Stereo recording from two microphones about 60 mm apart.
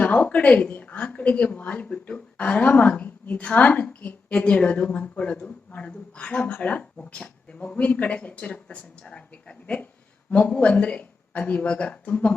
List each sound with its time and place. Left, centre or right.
0.0 s a woman's voice: left